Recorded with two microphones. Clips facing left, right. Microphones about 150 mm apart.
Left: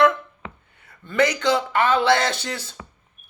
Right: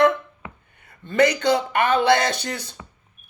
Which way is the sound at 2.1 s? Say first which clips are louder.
Right 1 dB; 20° right (ahead or behind).